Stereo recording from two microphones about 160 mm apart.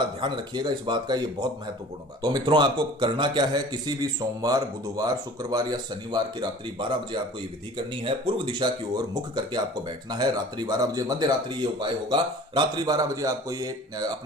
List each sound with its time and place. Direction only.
0.2 s speech: 30° right (ahead or behind)